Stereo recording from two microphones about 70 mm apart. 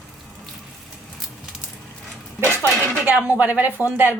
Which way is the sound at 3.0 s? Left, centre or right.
Right.